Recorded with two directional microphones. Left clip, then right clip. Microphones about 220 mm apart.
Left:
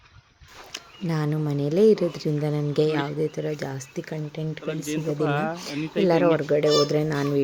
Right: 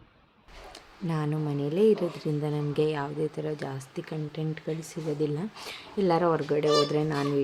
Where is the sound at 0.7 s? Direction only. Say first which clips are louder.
Left 4 dB; 20° left (ahead or behind).